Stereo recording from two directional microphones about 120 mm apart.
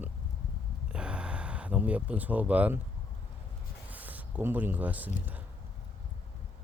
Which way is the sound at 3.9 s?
15° right (ahead or behind).